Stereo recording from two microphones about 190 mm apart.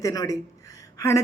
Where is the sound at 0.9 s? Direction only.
15° left (ahead or behind).